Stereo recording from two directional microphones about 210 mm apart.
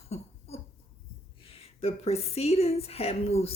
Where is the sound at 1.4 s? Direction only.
25° left (ahead or behind).